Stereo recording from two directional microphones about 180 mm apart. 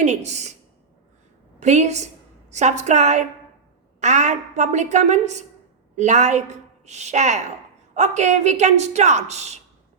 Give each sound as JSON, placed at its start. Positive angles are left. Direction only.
{"t": 0.0, "sound": "a woman's voice", "side_deg": -40}
{"t": 1.5, "sound": "a woman's voice", "side_deg": -40}